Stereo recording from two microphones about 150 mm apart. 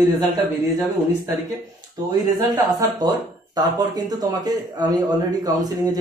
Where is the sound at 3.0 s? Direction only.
25° right (ahead or behind).